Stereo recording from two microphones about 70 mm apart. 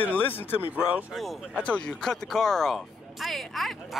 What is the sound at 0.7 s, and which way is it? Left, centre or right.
Speech, centre.